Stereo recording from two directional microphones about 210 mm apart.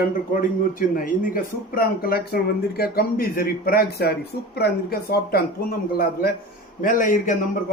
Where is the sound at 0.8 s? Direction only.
40° left (ahead or behind).